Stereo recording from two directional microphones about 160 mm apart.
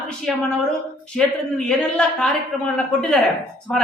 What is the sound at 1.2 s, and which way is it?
A woman's voice, 5° left (ahead or behind).